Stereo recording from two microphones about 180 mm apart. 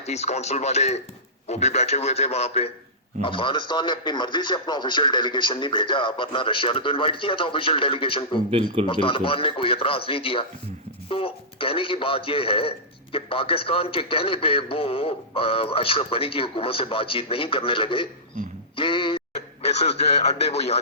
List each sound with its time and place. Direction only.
0.0 s a man's voice: 35° left (ahead or behind)
18.8 s a sound: 30° left (ahead or behind)
19.6 s a man's voice: 35° left (ahead or behind)